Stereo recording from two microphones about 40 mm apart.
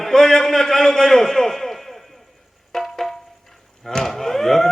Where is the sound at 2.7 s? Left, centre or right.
Centre.